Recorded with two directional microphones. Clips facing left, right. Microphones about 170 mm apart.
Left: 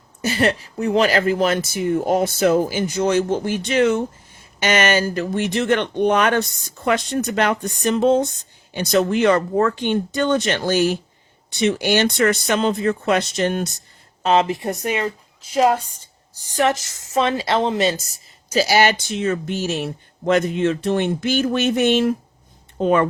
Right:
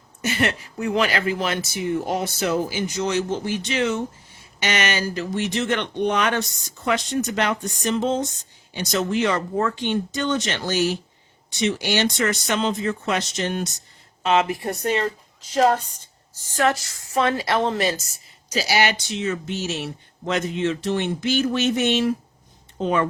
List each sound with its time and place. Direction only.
0.2 s speech: 35° left (ahead or behind); by 13.7 s 50° left (ahead or behind)
14.2 s a woman's voice: 35° left (ahead or behind)
18.5 s speech: 45° left (ahead or behind)